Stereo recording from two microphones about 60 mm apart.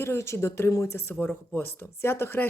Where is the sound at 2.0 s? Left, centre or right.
Left.